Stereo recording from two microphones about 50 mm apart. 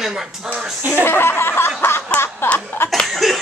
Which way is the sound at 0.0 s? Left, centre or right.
Centre.